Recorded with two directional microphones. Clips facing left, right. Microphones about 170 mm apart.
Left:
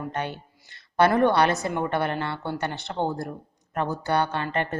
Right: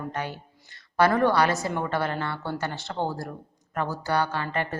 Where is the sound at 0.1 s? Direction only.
25° left (ahead or behind).